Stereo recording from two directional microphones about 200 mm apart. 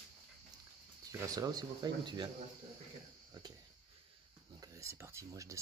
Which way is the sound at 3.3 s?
20° right (ahead or behind).